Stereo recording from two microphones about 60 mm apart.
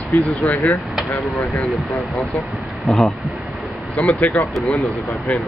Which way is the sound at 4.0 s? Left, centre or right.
Left.